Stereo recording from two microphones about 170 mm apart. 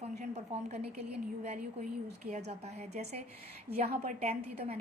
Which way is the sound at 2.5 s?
40° right (ahead or behind).